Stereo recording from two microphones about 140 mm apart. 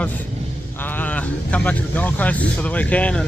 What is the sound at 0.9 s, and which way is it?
Speech, 10° left (ahead or behind).